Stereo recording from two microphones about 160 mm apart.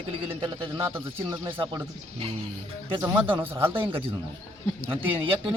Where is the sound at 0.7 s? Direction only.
15° right (ahead or behind).